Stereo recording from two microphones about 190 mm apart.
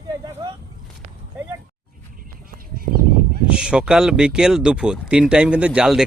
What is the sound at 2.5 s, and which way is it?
Honk, 50° right (ahead or behind).